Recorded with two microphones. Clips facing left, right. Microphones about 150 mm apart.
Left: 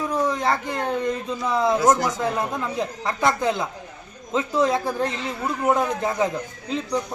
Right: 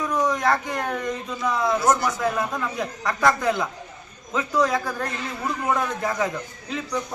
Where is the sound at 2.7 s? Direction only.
25° left (ahead or behind).